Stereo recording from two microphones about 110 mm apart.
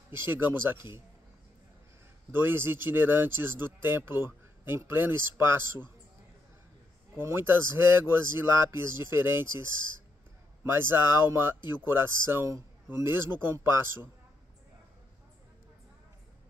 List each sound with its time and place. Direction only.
0.1 s speech: 20° right (ahead or behind)
2.3 s speech: 20° right (ahead or behind)
7.2 s speech: 20° right (ahead or behind)